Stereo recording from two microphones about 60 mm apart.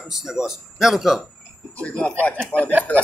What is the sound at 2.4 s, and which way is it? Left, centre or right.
Speech, left.